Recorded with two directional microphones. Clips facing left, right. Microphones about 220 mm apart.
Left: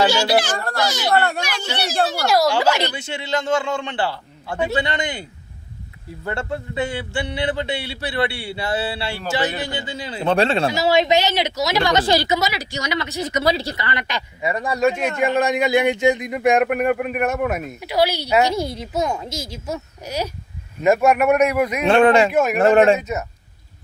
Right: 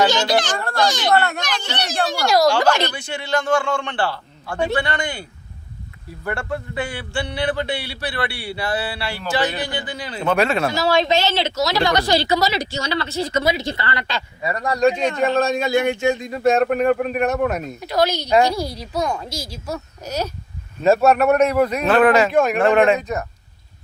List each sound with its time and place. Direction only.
0.1 s speech: 10° left (ahead or behind)
1.4 s a sound: 10° left (ahead or behind)
2.9 s a man's voice: 25° left (ahead or behind)
6.2 s a man's voice: 25° left (ahead or behind)
10.7 s a man's voice: 20° left (ahead or behind)
13.4 s speech: 20° right (ahead or behind)
13.7 s speech: 20° left (ahead or behind)
14.8 s speech: 5° left (ahead or behind)
18.5 s a man's voice: 25° left (ahead or behind)
21.8 s a man's voice: 25° left (ahead or behind)
22.3 s a man's voice: 5° left (ahead or behind)
22.6 s speech: 40° left (ahead or behind)
23.0 s a man's voice: 5° left (ahead or behind)